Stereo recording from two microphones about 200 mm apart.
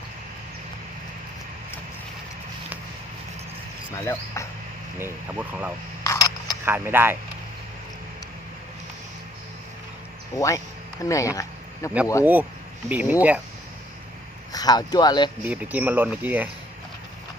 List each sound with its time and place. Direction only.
3.9 s speech: 15° left (ahead or behind)
4.9 s speech: 10° right (ahead or behind)
6.0 s a sound: 20° left (ahead or behind)
6.7 s speech: 10° right (ahead or behind)
10.3 s speech: 15° left (ahead or behind)
12.2 s speech: 10° right (ahead or behind)
14.5 s speech: 20° left (ahead or behind)
15.4 s speech: 10° right (ahead or behind)